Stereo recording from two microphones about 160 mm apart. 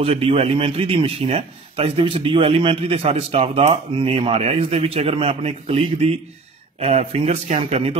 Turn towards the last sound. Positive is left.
turn(degrees=-40)  # may be behind; listen again after turning